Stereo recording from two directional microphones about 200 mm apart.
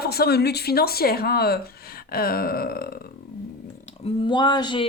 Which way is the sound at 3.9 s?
25° left (ahead or behind).